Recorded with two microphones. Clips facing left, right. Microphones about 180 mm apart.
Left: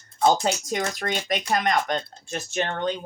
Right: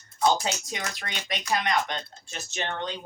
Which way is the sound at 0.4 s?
45° left (ahead or behind).